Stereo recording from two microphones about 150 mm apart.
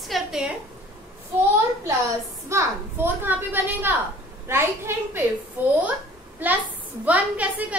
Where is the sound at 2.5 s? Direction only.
15° right (ahead or behind).